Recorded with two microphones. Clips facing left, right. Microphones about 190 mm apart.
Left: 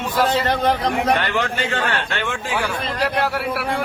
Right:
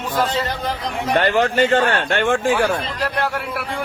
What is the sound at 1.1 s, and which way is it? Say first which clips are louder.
A man's voice: right 5 dB; 45° right (ahead or behind).